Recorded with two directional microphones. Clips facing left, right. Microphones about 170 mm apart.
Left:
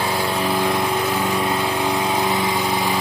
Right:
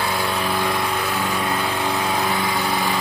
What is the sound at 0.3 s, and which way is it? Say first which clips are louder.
Vehicle: left 2 dB; 25° left (ahead or behind).